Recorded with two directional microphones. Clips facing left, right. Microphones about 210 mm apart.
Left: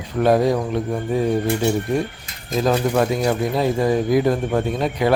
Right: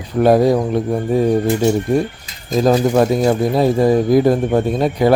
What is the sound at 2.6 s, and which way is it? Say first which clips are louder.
A man's voice: right 5 dB; 35° right (ahead or behind).